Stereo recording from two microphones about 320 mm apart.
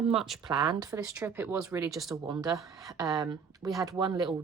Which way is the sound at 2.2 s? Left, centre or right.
Centre.